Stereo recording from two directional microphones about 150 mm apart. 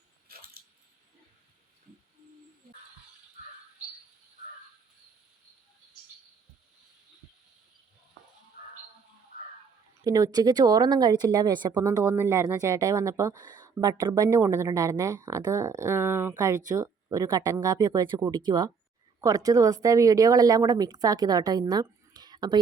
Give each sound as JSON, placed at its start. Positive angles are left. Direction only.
{"t": 0.3, "sound": "squish", "side_deg": -85}
{"t": 10.0, "sound": "speech", "side_deg": -25}